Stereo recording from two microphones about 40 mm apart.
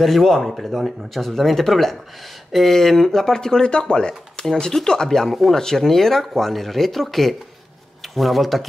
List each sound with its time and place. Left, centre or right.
0.0 s speech: centre
4.4 s a sound: left
4.7 s speech: centre
5.3 s speech: centre